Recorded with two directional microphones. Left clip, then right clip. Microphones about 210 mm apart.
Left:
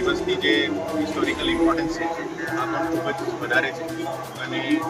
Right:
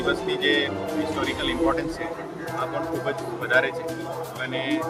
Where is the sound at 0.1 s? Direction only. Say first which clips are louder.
Even; 25° right (ahead or behind).